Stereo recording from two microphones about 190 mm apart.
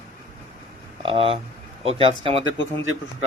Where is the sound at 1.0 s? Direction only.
30° right (ahead or behind).